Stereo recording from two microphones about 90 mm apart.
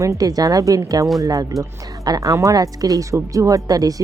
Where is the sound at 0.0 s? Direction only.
40° right (ahead or behind).